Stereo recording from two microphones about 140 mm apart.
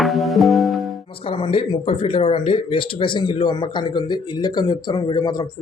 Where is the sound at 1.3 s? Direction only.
40° left (ahead or behind).